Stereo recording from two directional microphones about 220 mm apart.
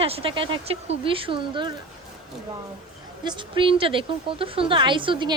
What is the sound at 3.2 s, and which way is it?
Speech, 20° right (ahead or behind).